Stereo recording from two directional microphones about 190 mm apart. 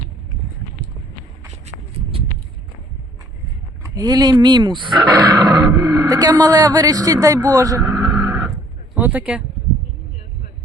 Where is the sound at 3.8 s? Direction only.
20° right (ahead or behind).